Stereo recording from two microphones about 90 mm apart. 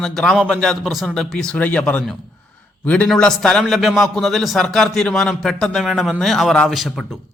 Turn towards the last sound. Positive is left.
turn(degrees=0)  # may be behind; listen again after turning